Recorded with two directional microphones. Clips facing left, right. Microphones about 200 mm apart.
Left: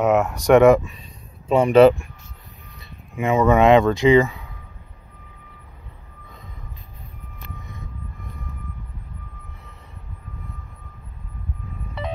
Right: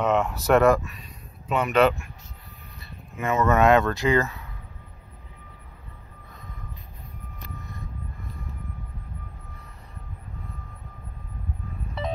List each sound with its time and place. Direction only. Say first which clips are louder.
0.0 s speech: left 5 dB; 5° left (ahead or behind)
1.5 s speech: left 8 dB; 30° left (ahead or behind)
3.2 s speech: left 5 dB; 15° left (ahead or behind)